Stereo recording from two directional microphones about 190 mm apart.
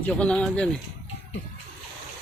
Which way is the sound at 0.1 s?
5° left (ahead or behind).